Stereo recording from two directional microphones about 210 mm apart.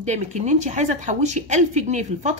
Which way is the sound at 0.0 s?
35° right (ahead or behind).